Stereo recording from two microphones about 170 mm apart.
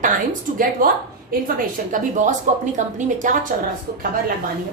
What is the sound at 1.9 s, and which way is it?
A woman's voice, 45° right (ahead or behind).